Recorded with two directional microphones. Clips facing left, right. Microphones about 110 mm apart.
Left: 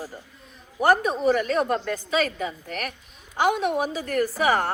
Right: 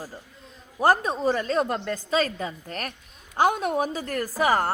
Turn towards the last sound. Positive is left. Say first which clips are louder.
# even
turn(degrees=-40)  # may be behind; listen again after turning